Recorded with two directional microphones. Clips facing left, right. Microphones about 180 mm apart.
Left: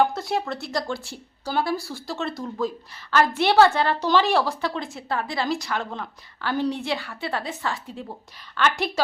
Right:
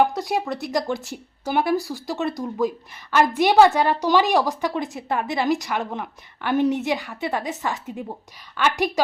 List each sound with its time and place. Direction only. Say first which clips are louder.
0.0 s speech: right 2 dB; 15° right (ahead or behind)